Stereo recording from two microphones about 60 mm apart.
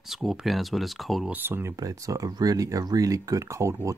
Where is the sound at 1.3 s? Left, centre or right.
Right.